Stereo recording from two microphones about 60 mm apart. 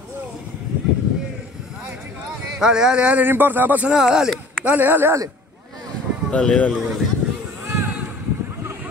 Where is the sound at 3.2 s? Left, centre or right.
Right.